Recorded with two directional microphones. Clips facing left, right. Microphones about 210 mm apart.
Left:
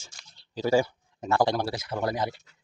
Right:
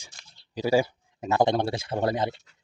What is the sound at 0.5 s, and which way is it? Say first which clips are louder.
Speech: right 1 dB; 15° right (ahead or behind).